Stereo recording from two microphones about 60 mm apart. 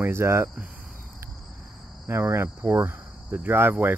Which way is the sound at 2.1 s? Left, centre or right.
Right.